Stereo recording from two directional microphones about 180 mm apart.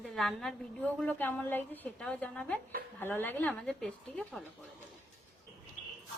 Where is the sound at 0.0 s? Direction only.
Centre (ahead or behind).